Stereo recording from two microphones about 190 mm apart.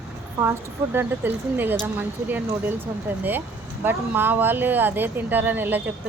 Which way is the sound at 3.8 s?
10° right (ahead or behind).